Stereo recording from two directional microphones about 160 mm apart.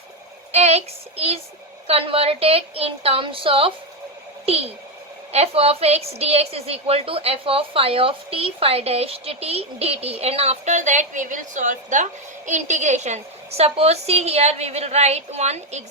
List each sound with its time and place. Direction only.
0.5 s a woman's voice: 40° right (ahead or behind)